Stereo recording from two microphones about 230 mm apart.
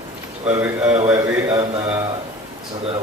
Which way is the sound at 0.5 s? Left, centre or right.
Centre.